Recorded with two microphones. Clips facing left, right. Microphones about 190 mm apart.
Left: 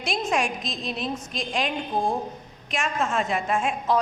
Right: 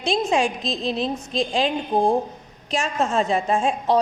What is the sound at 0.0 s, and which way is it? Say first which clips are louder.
A woman's voice: right 5 dB; 30° right (ahead or behind).